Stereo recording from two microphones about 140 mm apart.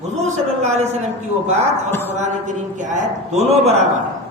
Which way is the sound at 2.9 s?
55° right (ahead or behind).